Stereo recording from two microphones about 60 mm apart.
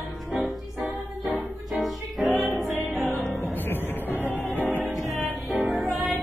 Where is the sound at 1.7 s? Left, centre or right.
Centre.